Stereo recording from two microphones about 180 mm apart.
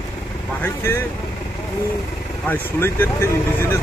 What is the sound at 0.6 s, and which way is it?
Speech, 15° left (ahead or behind).